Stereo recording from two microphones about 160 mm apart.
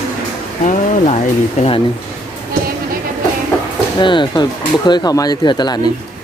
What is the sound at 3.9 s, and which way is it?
Speech, 30° left (ahead or behind).